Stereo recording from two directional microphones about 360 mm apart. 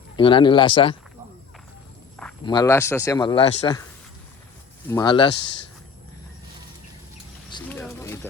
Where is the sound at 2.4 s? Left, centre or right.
Centre.